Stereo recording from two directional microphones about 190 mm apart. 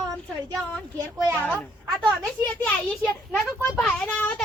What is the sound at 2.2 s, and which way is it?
A child's voice, 5° left (ahead or behind).